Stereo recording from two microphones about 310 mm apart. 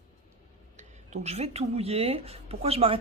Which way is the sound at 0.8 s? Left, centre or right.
Right.